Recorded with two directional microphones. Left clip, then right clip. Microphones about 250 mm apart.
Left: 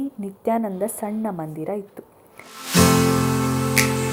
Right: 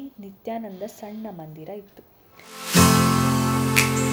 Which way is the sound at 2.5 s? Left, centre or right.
Centre.